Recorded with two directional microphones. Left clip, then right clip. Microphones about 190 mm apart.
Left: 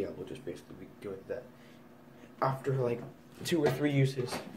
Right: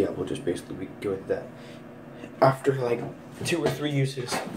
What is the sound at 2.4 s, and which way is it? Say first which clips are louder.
Speech: right 11 dB; 5° left (ahead or behind).